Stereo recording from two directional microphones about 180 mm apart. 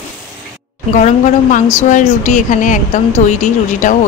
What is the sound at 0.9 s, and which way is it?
Speech, 45° left (ahead or behind).